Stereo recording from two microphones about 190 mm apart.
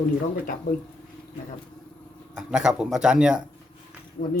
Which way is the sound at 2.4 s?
5° right (ahead or behind).